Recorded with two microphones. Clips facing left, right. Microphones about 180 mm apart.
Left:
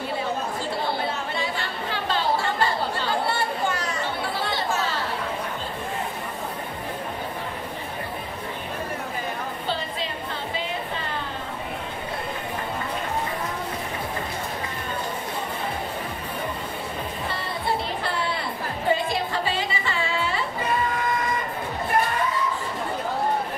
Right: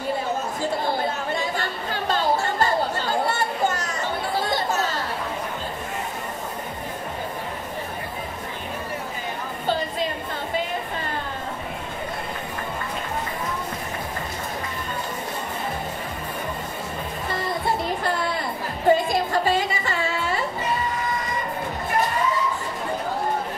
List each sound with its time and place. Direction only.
1.3 s chatter: 45° right (ahead or behind)
17.3 s music: 45° right (ahead or behind)